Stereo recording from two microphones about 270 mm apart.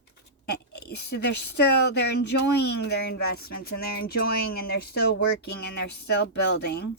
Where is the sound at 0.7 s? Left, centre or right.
Left.